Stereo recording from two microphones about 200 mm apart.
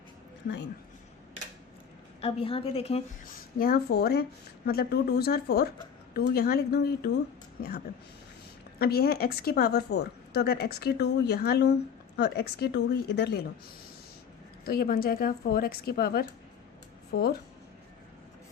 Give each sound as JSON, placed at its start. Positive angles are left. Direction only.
{"t": 2.2, "sound": "a woman's voice", "side_deg": 30}
{"t": 3.6, "sound": "speech", "side_deg": 50}
{"t": 8.8, "sound": "speech", "side_deg": 50}
{"t": 14.7, "sound": "speech", "side_deg": 50}